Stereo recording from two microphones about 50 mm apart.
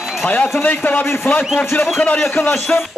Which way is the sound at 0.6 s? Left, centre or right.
Left.